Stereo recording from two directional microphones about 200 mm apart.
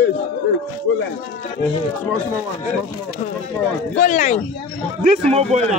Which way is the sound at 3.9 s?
40° left (ahead or behind).